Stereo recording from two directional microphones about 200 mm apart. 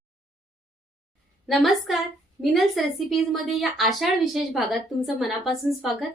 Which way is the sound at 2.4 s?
Centre (ahead or behind).